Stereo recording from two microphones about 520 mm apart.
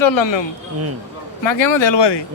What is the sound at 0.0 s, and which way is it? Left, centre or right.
Speech, left.